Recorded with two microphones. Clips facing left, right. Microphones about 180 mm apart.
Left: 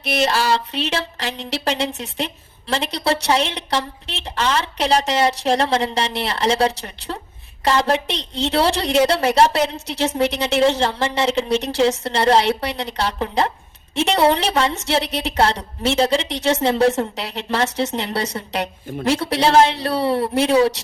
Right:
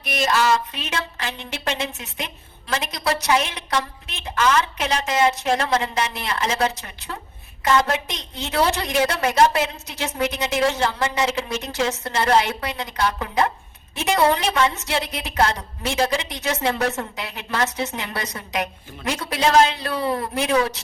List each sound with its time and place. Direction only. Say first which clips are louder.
0.3 s a woman's voice: even; 30° left (ahead or behind)